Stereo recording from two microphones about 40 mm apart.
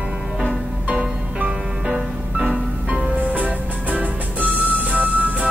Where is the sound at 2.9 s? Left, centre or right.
Right.